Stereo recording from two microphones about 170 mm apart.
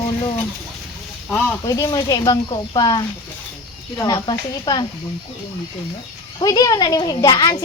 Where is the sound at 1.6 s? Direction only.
20° left (ahead or behind).